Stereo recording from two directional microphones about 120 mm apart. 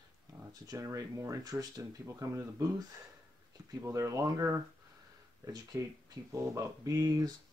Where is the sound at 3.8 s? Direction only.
25° right (ahead or behind).